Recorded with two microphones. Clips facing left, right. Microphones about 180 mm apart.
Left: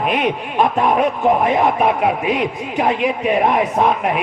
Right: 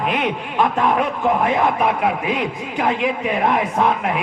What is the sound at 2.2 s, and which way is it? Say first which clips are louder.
A man's voice: left 3 dB; 20° left (ahead or behind).